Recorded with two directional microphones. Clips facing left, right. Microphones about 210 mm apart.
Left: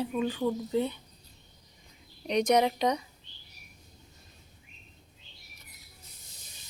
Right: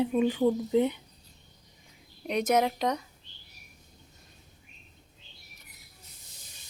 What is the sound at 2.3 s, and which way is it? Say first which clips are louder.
Speech: left 1 dB; 5° right (ahead or behind).